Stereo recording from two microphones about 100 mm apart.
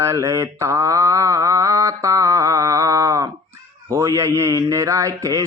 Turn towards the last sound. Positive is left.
turn(degrees=-35)  # may be behind; listen again after turning